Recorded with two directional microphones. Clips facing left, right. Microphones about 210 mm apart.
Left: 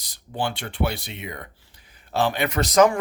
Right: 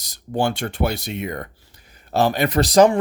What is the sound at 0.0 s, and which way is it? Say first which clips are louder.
Speech: right 6 dB; 45° right (ahead or behind).